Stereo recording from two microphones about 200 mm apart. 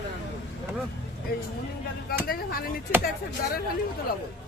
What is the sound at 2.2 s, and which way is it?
Speech, 50° left (ahead or behind).